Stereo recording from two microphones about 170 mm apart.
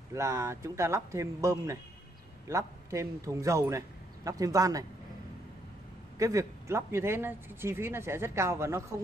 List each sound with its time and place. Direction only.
0.1 s a man's voice: 15° right (ahead or behind)
6.1 s speech: 20° right (ahead or behind)